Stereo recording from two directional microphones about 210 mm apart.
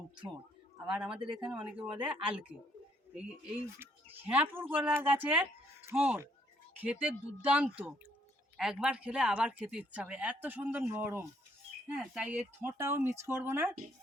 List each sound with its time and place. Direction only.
0.9 s speech: 5° right (ahead or behind)